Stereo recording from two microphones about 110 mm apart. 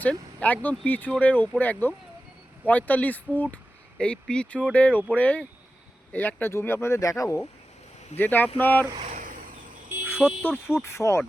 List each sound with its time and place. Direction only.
0.0 s speech: 10° left (ahead or behind); by 7.4 s 30° left (ahead or behind)
8.2 s speech: 15° left (ahead or behind)
10.2 s speech: 15° left (ahead or behind)